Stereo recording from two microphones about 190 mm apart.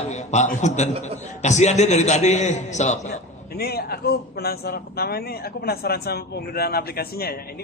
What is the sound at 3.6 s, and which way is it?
A man's voice, 55° left (ahead or behind).